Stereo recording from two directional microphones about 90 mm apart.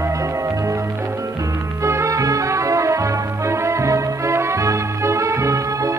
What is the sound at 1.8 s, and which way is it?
Music, 35° right (ahead or behind).